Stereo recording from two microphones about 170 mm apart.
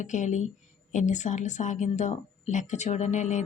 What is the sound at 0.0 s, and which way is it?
Music, 45° left (ahead or behind).